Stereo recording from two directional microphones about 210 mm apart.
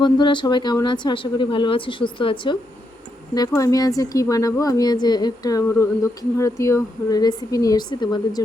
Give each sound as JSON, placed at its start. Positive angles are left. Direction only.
{"t": 0.0, "sound": "speech", "side_deg": 20}